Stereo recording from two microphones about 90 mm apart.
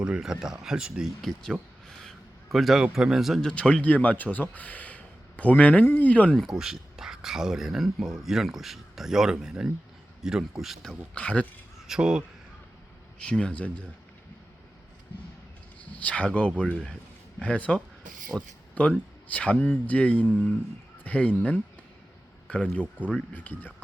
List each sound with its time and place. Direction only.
0.0 s speech: 10° right (ahead or behind)
1.9 s a sound: 5° left (ahead or behind)
2.8 s speech: 5° right (ahead or behind)
3.5 s speech: 10° left (ahead or behind)
6.5 s a man's voice: 5° right (ahead or behind)
11.1 s speech: 15° left (ahead or behind)
11.9 s speech: 5° right (ahead or behind)
13.1 s speech: 10° left (ahead or behind)
16.0 s a man's voice: 10° left (ahead or behind)